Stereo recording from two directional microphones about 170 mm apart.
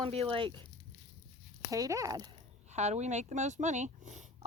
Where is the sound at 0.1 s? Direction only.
35° right (ahead or behind).